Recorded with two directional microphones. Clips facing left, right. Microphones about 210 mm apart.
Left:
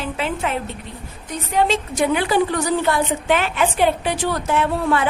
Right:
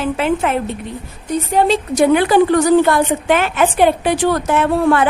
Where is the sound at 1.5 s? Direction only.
35° right (ahead or behind).